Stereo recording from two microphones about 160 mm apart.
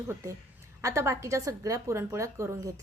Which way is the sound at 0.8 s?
20° right (ahead or behind).